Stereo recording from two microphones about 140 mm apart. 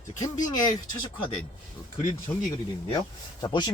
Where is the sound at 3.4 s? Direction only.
35° left (ahead or behind).